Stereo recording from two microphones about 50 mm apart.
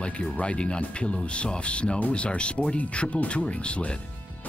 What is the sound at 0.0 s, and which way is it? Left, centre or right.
Speech, left.